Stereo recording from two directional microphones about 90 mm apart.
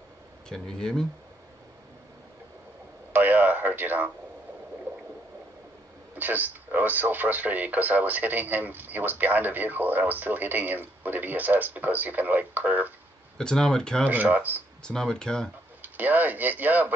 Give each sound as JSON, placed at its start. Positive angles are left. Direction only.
{"t": 0.5, "sound": "speech", "side_deg": 10}
{"t": 3.1, "sound": "a sound", "side_deg": -20}
{"t": 6.1, "sound": "speech", "side_deg": -20}
{"t": 13.4, "sound": "speech", "side_deg": 10}
{"t": 14.0, "sound": "speech", "side_deg": -20}
{"t": 14.8, "sound": "speech", "side_deg": 10}
{"t": 15.8, "sound": "speech", "side_deg": -20}